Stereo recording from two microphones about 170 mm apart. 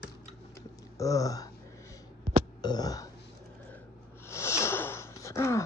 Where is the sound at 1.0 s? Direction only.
20° left (ahead or behind).